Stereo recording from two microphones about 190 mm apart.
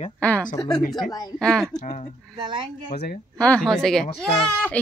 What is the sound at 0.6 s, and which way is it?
Speech, 20° left (ahead or behind).